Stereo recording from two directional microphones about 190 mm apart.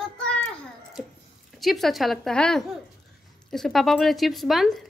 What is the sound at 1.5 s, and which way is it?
A woman's voice, centre (ahead or behind).